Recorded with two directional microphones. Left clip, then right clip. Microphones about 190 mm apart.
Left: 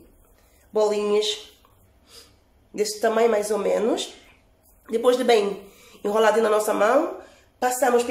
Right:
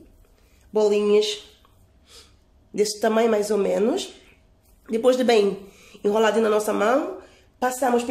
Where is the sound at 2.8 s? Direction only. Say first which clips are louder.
Even; 35° right (ahead or behind).